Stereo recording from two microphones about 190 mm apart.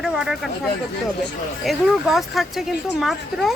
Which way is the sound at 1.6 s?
Centre (ahead or behind).